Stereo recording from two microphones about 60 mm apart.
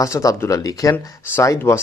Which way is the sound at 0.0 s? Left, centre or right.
Left.